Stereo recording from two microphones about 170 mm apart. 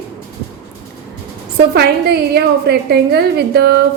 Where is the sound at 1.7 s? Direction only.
70° right (ahead or behind).